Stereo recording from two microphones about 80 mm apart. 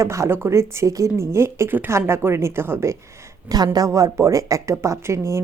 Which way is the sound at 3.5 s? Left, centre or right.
Right.